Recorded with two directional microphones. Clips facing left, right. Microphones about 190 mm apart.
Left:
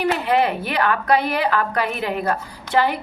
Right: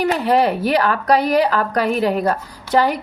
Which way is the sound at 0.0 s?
40° right (ahead or behind).